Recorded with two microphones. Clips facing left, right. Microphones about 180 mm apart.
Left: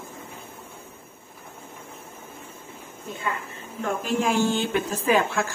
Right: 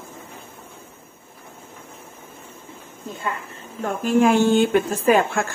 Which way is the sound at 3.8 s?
50° right (ahead or behind).